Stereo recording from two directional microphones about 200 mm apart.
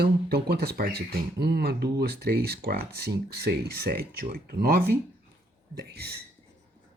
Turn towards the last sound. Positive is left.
turn(degrees=-50)  # may be behind; listen again after turning